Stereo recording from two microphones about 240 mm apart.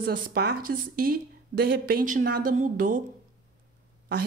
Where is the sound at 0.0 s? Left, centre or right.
Right.